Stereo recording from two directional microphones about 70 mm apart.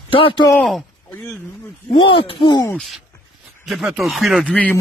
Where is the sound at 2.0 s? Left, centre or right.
Left.